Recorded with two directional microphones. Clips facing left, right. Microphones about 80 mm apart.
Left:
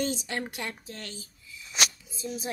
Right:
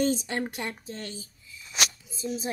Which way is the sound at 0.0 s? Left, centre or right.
Right.